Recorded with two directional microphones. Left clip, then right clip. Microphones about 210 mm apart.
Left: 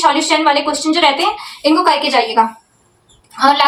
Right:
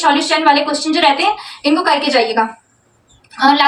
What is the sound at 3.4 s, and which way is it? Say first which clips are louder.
Speech: even; 15° left (ahead or behind).